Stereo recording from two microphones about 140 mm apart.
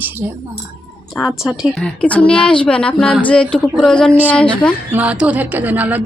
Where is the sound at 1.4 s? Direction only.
5° left (ahead or behind).